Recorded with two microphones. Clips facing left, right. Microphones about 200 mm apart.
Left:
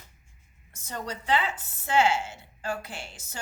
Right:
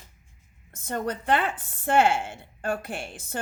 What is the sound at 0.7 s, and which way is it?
Speech, 55° right (ahead or behind).